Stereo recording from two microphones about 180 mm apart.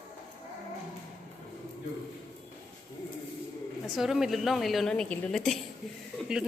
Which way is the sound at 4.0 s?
Centre (ahead or behind).